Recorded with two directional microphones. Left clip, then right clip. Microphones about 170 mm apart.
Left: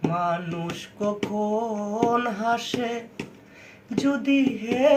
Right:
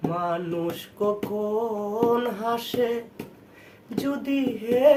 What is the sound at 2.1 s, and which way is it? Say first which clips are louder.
Music: left 2 dB; 25° right (ahead or behind).